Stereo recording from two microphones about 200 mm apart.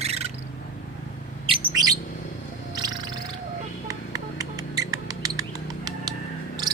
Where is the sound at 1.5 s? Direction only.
20° right (ahead or behind).